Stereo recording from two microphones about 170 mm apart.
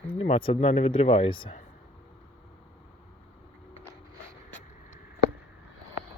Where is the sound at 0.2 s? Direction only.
35° left (ahead or behind).